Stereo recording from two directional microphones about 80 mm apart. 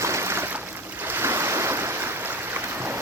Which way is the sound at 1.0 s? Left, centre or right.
Right.